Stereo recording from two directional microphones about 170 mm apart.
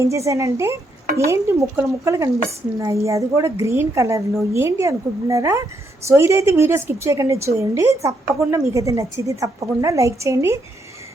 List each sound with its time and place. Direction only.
0.0 s a woman's voice: 20° right (ahead or behind)